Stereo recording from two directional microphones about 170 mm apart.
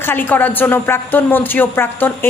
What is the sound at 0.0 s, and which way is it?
A woman's voice, 10° left (ahead or behind).